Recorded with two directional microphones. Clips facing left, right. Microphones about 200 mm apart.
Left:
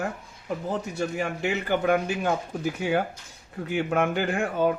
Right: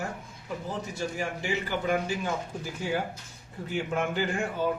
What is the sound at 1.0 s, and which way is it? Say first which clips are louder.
Speech: left 4 dB; 65° left (ahead or behind).